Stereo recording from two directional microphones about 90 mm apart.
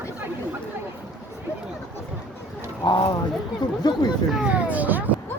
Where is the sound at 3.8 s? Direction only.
45° left (ahead or behind).